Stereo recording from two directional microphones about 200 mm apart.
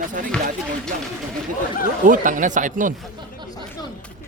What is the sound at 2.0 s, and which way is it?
Speech, 40° right (ahead or behind).